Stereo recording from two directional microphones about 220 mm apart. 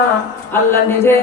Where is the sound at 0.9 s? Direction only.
10° left (ahead or behind).